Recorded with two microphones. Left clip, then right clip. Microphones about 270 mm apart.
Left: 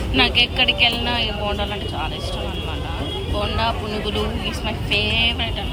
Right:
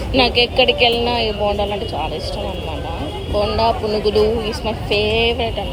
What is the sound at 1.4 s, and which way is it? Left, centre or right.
Speech, left.